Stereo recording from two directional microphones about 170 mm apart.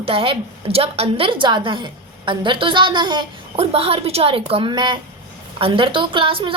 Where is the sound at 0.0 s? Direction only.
30° right (ahead or behind).